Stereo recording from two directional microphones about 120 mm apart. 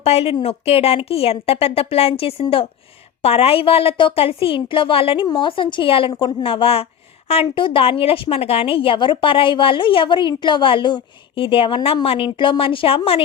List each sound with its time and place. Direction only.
0.0 s a woman's voice: 55° left (ahead or behind)